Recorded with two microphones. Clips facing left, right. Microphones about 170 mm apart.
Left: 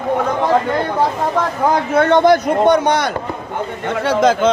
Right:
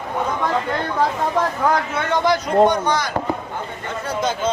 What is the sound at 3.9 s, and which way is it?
Speech, 85° left.